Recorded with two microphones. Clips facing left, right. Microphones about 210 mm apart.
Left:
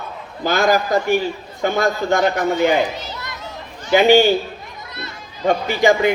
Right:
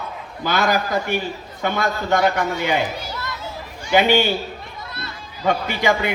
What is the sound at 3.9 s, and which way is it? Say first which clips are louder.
Speech: left 4 dB; 45° left (ahead or behind).